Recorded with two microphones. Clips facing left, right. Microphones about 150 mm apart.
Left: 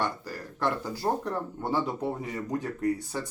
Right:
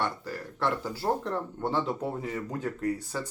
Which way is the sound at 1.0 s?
5° left (ahead or behind).